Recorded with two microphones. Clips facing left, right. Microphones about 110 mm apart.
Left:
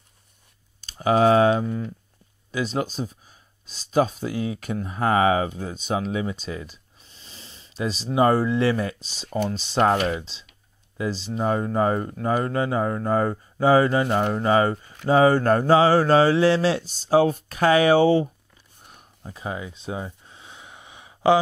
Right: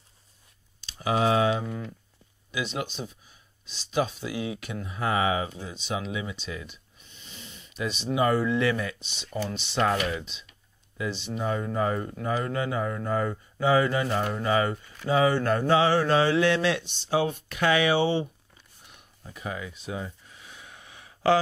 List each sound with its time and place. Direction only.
0.7 s speech: 45° left (ahead or behind)
14.0 s speech: 50° left (ahead or behind)
18.9 s a sound: 45° left (ahead or behind)
19.3 s gasp: 30° left (ahead or behind)